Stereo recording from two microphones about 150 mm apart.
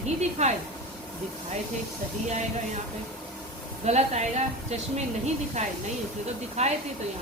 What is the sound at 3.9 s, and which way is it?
A woman's voice, 50° right (ahead or behind).